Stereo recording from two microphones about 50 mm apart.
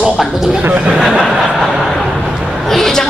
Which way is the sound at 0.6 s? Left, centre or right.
Right.